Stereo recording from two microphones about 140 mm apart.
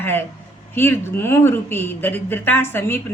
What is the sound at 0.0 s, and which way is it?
A man's voice, 15° left (ahead or behind).